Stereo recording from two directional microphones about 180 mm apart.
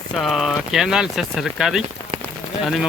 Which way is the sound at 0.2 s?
Centre (ahead or behind).